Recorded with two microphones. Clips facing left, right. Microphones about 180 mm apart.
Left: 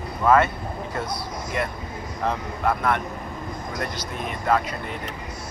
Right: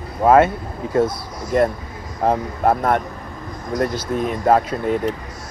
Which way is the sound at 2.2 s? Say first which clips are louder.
Right 8 dB; 50° right (ahead or behind).